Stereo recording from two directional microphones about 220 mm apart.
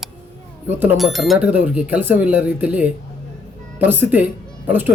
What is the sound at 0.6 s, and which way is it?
Speech, 10° right (ahead or behind).